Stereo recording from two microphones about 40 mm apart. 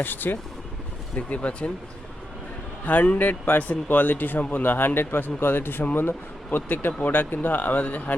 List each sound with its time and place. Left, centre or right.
0.0 s a man's voice: left
1.1 s speech: left
2.8 s a man's voice: left
4.9 s a man's voice: left